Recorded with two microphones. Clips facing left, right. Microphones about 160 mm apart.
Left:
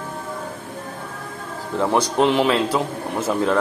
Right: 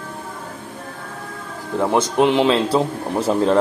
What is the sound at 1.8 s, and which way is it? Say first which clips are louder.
A man's voice: right 2 dB; 20° right (ahead or behind).